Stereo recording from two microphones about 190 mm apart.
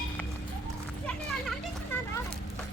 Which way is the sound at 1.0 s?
5° left (ahead or behind).